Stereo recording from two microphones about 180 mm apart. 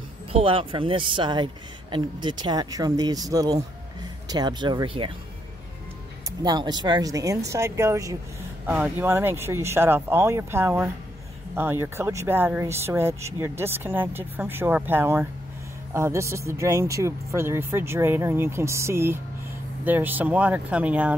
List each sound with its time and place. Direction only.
0.3 s speech: 30° right (ahead or behind)
6.4 s speech: 25° right (ahead or behind); by 21.1 s 10° right (ahead or behind)